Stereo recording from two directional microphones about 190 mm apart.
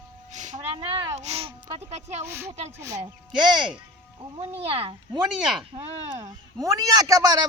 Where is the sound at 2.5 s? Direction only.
35° right (ahead or behind).